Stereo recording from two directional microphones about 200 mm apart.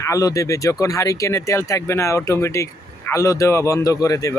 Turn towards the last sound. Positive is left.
turn(degrees=15)  # may be behind; listen again after turning